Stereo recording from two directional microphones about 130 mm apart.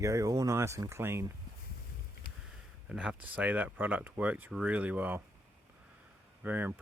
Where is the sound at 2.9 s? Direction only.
5° right (ahead or behind).